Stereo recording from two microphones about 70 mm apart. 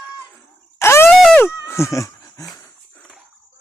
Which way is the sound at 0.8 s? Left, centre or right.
Left.